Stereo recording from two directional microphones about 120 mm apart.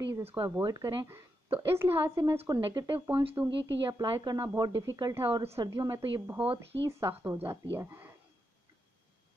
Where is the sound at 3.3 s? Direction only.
25° right (ahead or behind).